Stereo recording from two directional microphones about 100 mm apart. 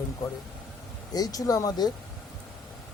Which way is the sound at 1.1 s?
40° left (ahead or behind).